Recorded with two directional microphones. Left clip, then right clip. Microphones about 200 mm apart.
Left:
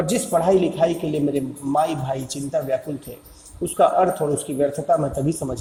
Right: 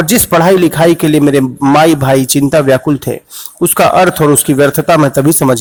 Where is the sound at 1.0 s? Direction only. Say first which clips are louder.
Right 14 dB; 40° right (ahead or behind).